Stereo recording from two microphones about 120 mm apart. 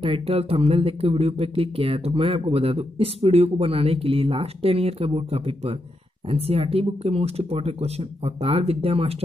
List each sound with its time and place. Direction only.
0.0 s speech: 50° right (ahead or behind)